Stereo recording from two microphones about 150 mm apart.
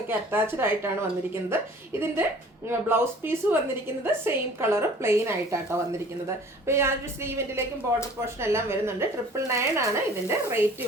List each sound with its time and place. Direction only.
0.1 s a woman's voice: 15° right (ahead or behind)